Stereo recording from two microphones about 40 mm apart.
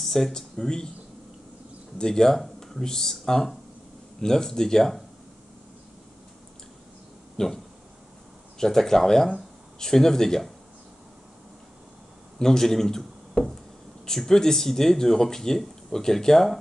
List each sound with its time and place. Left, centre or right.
0.0 s speech: centre
2.0 s speech: centre
2.3 s speech: centre
7.3 s speech: centre
12.4 s speech: centre